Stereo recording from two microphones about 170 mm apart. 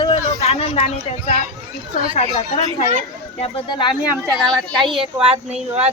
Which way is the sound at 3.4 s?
30° left (ahead or behind).